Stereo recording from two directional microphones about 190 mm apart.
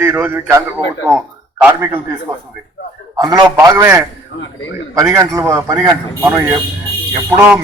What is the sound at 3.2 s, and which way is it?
A man's voice, 20° right (ahead or behind).